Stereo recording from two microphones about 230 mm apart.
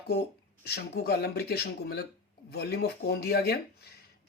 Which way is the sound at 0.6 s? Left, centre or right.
Left.